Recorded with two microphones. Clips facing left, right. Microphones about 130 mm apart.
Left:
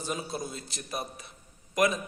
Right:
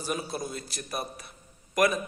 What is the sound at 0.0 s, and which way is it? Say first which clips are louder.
A man's voice: right 2 dB; 20° left (ahead or behind).